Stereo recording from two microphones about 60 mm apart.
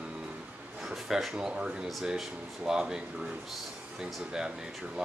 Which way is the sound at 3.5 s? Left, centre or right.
Centre.